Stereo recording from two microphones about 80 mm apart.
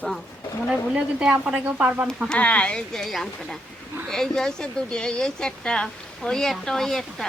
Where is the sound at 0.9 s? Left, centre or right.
Centre.